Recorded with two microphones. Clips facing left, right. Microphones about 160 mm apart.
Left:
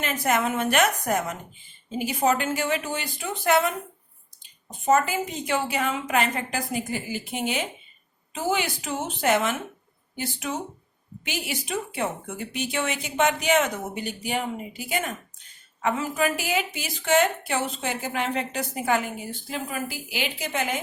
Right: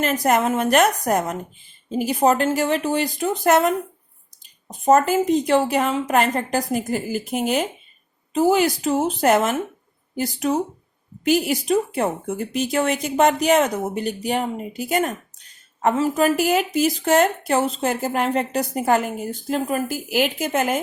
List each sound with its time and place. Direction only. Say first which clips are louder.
0.0 s speech: right 6 dB; 40° right (ahead or behind)
5.2 s speech: right 10 dB; 35° right (ahead or behind)